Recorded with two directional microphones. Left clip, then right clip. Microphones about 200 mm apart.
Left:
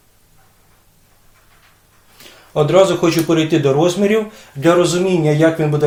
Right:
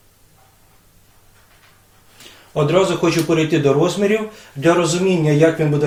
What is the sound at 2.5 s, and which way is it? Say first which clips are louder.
A man's voice: left 4 dB; 30° left (ahead or behind).